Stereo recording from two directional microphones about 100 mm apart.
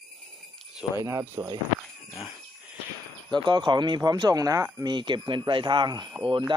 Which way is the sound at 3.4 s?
50° right (ahead or behind).